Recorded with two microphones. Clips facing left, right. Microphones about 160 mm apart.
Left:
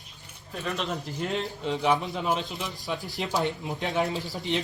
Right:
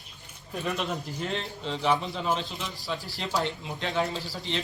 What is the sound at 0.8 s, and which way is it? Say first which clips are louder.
A man's voice: left 1 dB; centre (ahead or behind).